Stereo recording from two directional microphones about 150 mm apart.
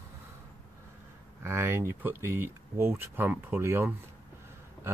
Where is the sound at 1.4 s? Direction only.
15° right (ahead or behind).